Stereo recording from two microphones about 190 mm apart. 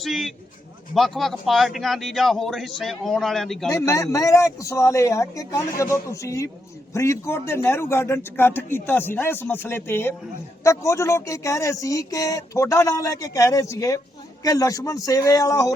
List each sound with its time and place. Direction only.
0.0 s a man's voice: centre (ahead or behind)
3.7 s a man's voice: 15° left (ahead or behind)